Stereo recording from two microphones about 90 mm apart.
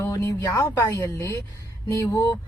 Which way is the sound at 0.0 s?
35° left (ahead or behind).